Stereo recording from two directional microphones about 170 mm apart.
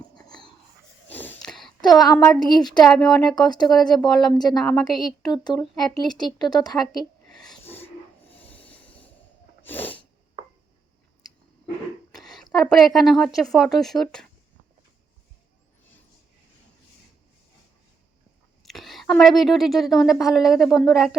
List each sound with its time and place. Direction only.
0.3 s a sound: 25° left (ahead or behind)
1.0 s a sound: 10° left (ahead or behind)
2.5 s speech: 25° left (ahead or behind)
2.8 s a woman's voice: centre (ahead or behind)
3.3 s speech: 25° left (ahead or behind)
3.7 s a woman's voice: centre (ahead or behind)
5.4 s speech: 25° left (ahead or behind)
7.4 s a sound: 5° left (ahead or behind)
8.4 s snort: 10° left (ahead or behind)
12.2 s a sound: centre (ahead or behind)
12.6 s a woman's voice: centre (ahead or behind)
18.6 s a woman's voice: centre (ahead or behind)